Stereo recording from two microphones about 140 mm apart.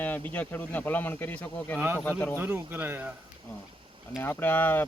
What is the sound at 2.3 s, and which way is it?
Speech, 15° right (ahead or behind).